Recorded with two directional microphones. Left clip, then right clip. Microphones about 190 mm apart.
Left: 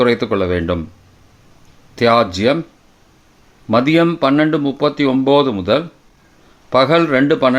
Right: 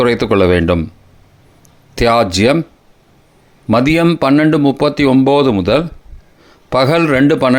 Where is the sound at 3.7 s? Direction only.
30° right (ahead or behind).